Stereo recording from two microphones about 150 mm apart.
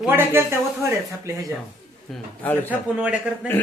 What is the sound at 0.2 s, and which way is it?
Speech, 15° right (ahead or behind).